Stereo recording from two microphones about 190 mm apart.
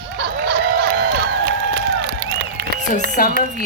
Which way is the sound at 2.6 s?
50° right (ahead or behind).